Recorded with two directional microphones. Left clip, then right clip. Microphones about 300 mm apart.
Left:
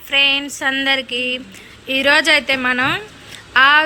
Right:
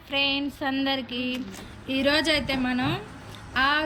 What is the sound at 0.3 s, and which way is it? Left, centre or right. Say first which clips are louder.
A woman's voice: left 9 dB; centre.